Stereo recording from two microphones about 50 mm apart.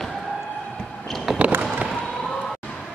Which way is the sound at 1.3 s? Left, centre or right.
Centre.